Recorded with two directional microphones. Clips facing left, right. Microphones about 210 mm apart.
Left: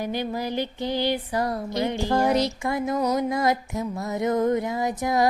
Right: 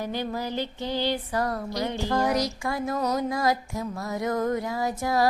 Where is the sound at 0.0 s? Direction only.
15° left (ahead or behind).